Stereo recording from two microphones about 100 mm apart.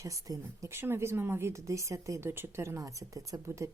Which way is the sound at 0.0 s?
35° right (ahead or behind).